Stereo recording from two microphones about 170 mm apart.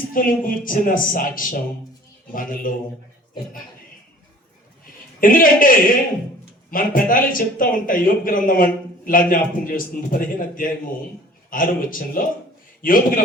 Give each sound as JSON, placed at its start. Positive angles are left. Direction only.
{"t": 0.1, "sound": "speech", "side_deg": 55}
{"t": 5.2, "sound": "speech", "side_deg": 55}